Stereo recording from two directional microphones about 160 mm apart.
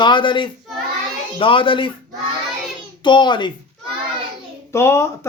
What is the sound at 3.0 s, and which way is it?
Speech, 30° left (ahead or behind).